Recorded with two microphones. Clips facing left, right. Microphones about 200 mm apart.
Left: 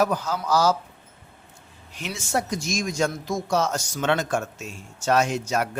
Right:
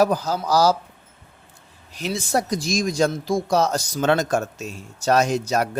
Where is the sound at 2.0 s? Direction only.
35° right (ahead or behind).